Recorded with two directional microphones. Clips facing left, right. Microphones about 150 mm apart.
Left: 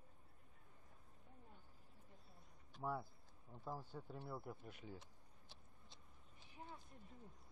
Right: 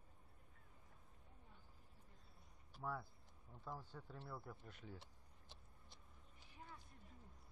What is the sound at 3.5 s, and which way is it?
Speech, 15° left (ahead or behind).